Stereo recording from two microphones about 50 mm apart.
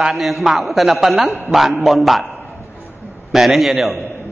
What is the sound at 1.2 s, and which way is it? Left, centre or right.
Speech, right.